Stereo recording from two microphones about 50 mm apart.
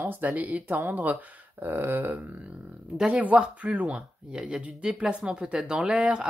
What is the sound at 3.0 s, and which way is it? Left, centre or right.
A woman's voice, right.